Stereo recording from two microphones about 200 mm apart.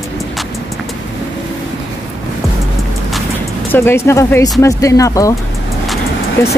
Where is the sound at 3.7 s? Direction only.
10° left (ahead or behind).